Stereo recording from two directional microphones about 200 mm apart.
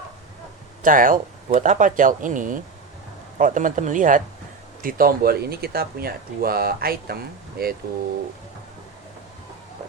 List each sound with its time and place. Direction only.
0.8 s speech: 45° right (ahead or behind)